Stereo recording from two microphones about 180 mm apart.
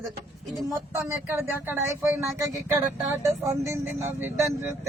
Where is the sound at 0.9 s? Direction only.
15° right (ahead or behind).